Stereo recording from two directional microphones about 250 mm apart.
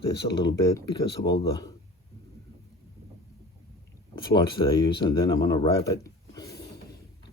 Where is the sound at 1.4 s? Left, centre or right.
Centre.